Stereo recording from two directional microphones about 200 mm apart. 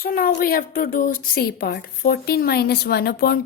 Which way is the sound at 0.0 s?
45° left (ahead or behind).